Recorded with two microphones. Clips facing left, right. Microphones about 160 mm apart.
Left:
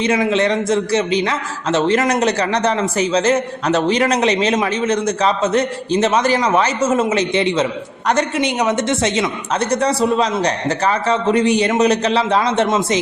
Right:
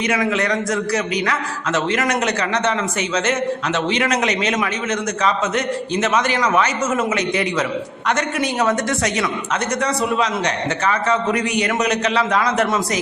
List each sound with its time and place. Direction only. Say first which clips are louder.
0.0 s a man's voice: left 4 dB; 25° left (ahead or behind)